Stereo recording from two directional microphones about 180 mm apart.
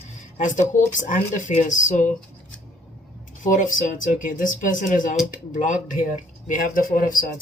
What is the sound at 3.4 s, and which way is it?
Speech, 45° left (ahead or behind).